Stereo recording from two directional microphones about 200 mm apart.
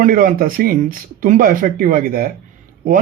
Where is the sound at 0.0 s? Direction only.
45° right (ahead or behind).